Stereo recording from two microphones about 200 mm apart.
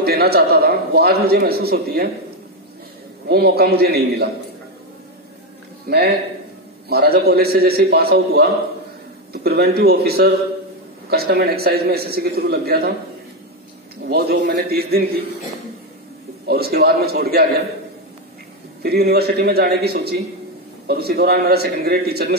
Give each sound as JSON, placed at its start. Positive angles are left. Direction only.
{"t": 0.0, "sound": "a man's voice", "side_deg": -50}
{"t": 3.3, "sound": "a man's voice", "side_deg": -50}
{"t": 5.9, "sound": "a man's voice", "side_deg": -50}
{"t": 14.0, "sound": "a man's voice", "side_deg": -55}
{"t": 16.4, "sound": "a man's voice", "side_deg": -50}
{"t": 18.8, "sound": "a man's voice", "side_deg": -50}